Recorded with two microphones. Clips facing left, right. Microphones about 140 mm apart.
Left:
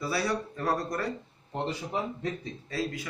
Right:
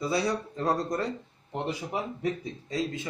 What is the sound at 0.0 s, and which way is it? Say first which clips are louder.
Speech: right 2 dB; 20° right (ahead or behind).